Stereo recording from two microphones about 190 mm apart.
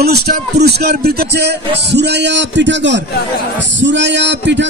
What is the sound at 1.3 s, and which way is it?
A man's voice, 60° right (ahead or behind).